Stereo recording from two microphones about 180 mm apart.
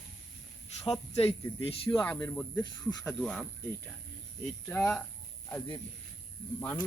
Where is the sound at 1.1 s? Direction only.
35° left (ahead or behind).